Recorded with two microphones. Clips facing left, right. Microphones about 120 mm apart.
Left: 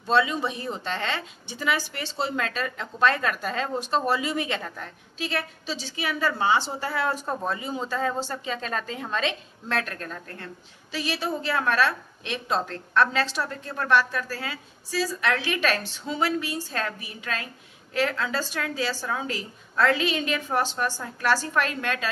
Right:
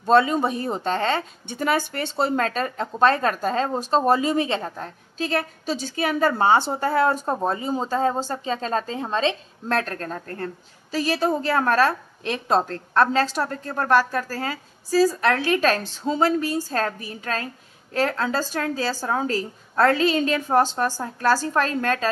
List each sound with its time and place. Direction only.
0.0 s speech: 45° right (ahead or behind)
7.2 s speech: 30° right (ahead or behind)